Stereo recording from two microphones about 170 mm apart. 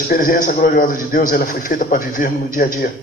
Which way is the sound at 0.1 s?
55° left (ahead or behind).